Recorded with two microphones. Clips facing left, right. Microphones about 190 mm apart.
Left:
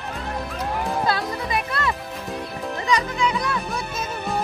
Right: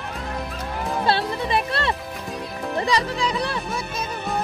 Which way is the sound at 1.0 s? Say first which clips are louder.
Right 2 dB; 30° right (ahead or behind).